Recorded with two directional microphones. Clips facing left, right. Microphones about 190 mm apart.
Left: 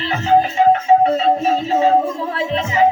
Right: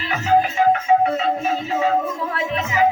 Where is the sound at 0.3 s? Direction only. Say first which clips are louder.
Left 3 dB; 30° left (ahead or behind).